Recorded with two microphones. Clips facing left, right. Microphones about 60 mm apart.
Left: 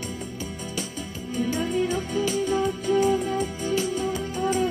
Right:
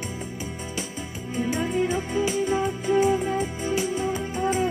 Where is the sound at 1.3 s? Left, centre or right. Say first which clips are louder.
Even; centre.